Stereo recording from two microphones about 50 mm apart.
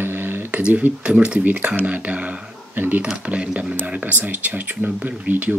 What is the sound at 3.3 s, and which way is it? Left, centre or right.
Speech, right.